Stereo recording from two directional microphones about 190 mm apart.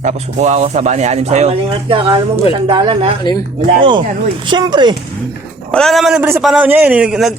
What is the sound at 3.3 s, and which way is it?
Speech, 20° left (ahead or behind).